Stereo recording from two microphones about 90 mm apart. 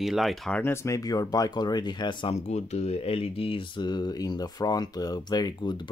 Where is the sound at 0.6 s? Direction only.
35° left (ahead or behind); by 2.3 s 55° left (ahead or behind).